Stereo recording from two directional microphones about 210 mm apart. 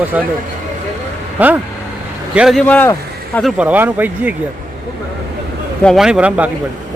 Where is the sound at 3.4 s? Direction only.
5° right (ahead or behind).